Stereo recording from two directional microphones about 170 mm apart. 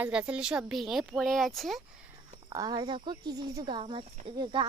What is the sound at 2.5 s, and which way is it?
Speech, 25° right (ahead or behind).